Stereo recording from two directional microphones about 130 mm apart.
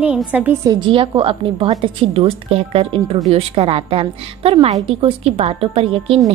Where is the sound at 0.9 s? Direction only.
40° right (ahead or behind).